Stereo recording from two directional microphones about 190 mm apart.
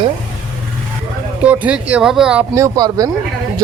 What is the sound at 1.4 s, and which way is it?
Speech, 5° right (ahead or behind).